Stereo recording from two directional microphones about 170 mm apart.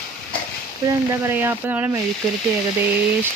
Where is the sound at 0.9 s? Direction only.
15° right (ahead or behind).